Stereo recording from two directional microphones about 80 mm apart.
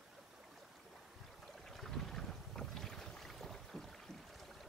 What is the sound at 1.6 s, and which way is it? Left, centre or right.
Boat, centre.